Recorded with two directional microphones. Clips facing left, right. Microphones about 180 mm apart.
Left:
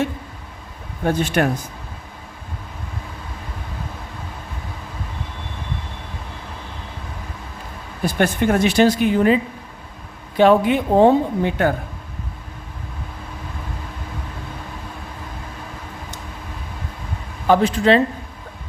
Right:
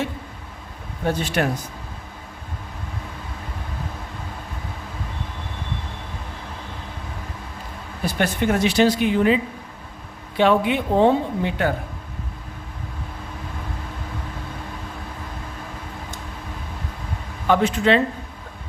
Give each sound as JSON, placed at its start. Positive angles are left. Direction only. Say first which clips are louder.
{"t": 1.0, "sound": "speech", "louder": "left 3 dB", "side_deg": 50}
{"t": 8.0, "sound": "speech", "louder": "left 3 dB", "side_deg": 50}
{"t": 17.4, "sound": "speech", "louder": "left 3 dB", "side_deg": 35}